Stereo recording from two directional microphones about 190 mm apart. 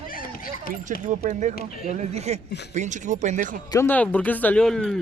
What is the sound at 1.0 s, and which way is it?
Speech, 40° right (ahead or behind).